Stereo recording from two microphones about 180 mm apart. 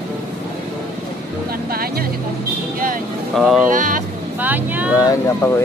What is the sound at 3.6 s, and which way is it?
Speech, 45° right (ahead or behind).